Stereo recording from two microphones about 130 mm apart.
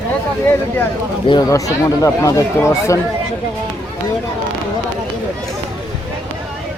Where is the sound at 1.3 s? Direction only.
25° left (ahead or behind).